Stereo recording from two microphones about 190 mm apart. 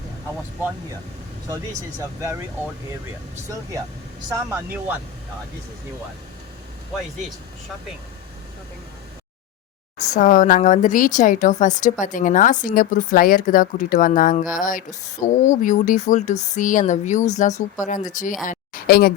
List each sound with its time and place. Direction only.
4.4 s speech: 10° right (ahead or behind)
10.2 s speech: 40° left (ahead or behind)